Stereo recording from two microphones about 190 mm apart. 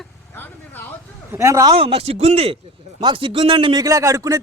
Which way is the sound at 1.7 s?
30° right (ahead or behind).